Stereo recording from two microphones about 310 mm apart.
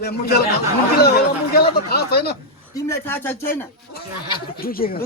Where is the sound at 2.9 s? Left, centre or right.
Centre.